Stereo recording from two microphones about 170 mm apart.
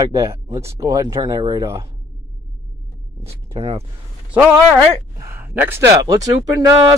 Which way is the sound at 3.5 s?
35° right (ahead or behind).